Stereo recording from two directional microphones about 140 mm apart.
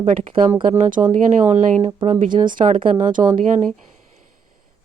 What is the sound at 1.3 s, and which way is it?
Speech, 60° right (ahead or behind).